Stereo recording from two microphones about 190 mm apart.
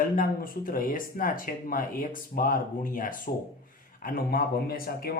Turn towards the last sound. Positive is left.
turn(degrees=50)  # may be behind; listen again after turning